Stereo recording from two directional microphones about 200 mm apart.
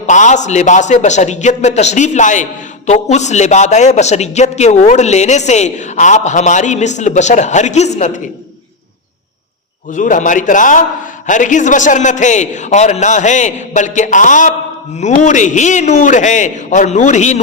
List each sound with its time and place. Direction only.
0.1 s a man's voice: 40° left (ahead or behind)
9.9 s a man's voice: 40° left (ahead or behind)